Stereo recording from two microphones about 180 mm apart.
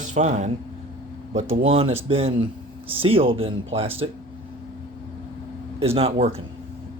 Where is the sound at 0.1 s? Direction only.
40° right (ahead or behind).